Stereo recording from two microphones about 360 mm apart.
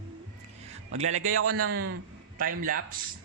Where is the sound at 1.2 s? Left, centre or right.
Right.